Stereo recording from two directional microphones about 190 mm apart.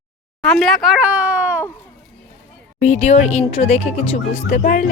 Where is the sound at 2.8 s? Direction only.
35° left (ahead or behind).